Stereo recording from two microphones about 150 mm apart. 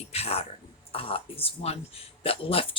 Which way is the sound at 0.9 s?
40° left (ahead or behind).